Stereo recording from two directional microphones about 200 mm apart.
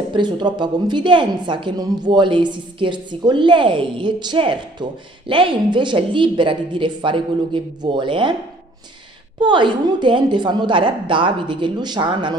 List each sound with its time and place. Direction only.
0.1 s speech: 20° right (ahead or behind)
9.4 s speech: 25° right (ahead or behind)